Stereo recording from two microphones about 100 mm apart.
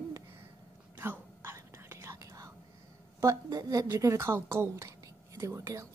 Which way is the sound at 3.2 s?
35° right (ahead or behind).